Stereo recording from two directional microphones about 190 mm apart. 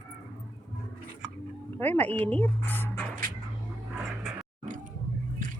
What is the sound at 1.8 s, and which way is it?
Speech, 10° left (ahead or behind).